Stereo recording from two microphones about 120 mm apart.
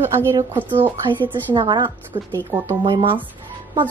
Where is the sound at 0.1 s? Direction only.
20° right (ahead or behind).